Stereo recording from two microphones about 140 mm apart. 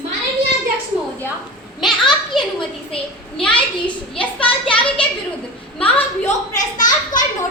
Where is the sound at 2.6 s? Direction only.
40° left (ahead or behind).